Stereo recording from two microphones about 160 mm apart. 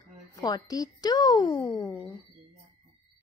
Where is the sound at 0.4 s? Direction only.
25° left (ahead or behind).